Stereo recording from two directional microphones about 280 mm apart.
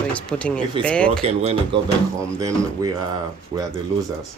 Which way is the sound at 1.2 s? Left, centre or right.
Right.